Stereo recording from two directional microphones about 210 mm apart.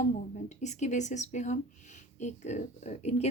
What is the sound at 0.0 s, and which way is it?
Speech, 35° left (ahead or behind).